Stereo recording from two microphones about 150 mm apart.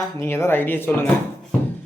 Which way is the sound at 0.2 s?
15° left (ahead or behind).